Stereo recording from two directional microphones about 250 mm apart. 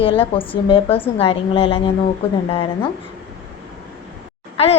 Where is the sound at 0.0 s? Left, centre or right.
Left.